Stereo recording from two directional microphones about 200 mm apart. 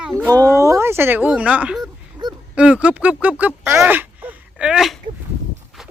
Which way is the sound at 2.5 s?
5° right (ahead or behind).